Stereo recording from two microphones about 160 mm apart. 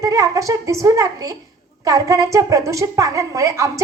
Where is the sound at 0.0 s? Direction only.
20° right (ahead or behind).